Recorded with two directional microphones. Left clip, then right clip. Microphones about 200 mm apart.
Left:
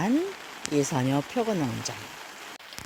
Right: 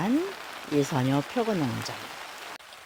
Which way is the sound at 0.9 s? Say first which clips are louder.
Even; 10° left (ahead or behind).